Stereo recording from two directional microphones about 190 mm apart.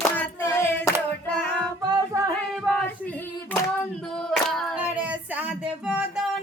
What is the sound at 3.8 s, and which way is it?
Female singing, 5° left (ahead or behind).